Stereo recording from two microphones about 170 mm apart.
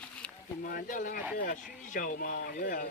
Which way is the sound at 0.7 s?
55° left (ahead or behind).